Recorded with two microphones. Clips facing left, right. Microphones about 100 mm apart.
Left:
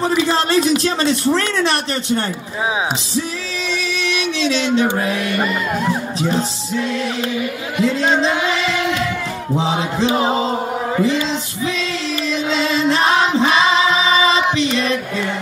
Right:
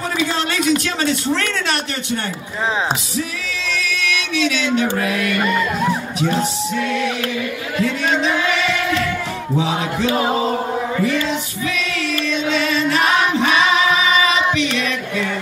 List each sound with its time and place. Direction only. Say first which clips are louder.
0.3 s speech: left 3 dB; 35° left (ahead or behind)
4.4 s speech: left 1 dB; 30° left (ahead or behind)
4.9 s chant: even; 30° left (ahead or behind)
6.8 s chant: even; 30° left (ahead or behind)
7.7 s chant: left 3 dB; 20° left (ahead or behind)
8.1 s music: left 1 dB; 30° left (ahead or behind)
9.9 s chant: left 1 dB; 20° left (ahead or behind)
11.0 s female singing: left 3 dB; 25° left (ahead or behind)
12.4 s choir: left 2 dB; 25° left (ahead or behind)
14.8 s music: left 2 dB; 30° left (ahead or behind)